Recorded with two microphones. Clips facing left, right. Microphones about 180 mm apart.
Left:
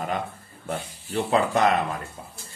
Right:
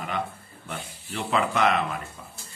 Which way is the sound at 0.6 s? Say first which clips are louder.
Left 6 dB; 40° left (ahead or behind).